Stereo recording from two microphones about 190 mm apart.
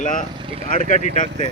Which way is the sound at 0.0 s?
45° left (ahead or behind).